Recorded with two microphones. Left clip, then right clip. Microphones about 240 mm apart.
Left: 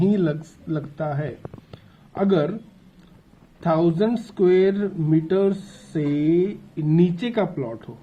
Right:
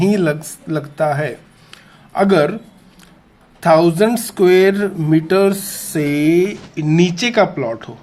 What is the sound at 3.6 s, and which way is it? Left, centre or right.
Speech, centre.